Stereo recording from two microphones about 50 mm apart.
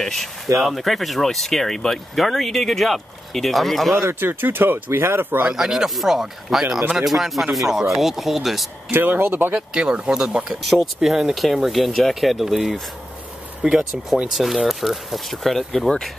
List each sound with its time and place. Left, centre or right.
0.0 s speech: centre
3.9 s speech: right
5.5 s speech: centre
8.9 s speech: right
9.8 s speech: centre
14.3 s speech: centre